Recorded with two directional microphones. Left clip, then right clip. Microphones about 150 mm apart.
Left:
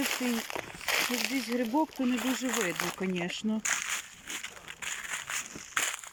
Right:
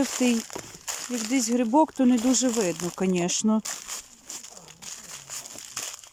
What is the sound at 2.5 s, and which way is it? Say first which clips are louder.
Speech: right 4 dB; 10° right (ahead or behind).